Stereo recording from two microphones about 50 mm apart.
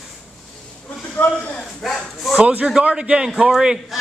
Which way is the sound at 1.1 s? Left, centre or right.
Left.